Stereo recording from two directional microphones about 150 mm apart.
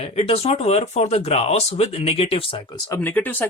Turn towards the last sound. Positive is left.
turn(degrees=10)  # may be behind; listen again after turning